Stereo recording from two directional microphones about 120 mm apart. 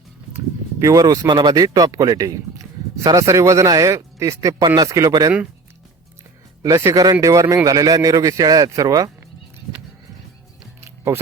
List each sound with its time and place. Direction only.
0.8 s speech: 30° right (ahead or behind)
6.6 s speech: 25° right (ahead or behind)
10.8 s music: 20° right (ahead or behind)